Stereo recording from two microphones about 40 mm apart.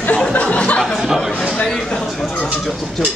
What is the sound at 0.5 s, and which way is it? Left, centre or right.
Speech, left.